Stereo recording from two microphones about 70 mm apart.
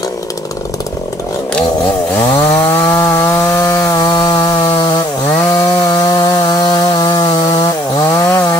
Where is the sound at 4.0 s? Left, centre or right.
Left.